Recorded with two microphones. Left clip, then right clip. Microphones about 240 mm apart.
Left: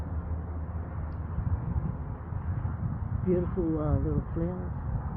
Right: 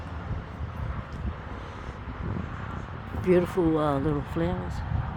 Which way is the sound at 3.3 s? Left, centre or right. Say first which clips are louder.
Right 7 dB; right.